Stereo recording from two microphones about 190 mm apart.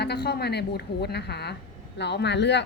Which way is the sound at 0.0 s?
60° left (ahead or behind).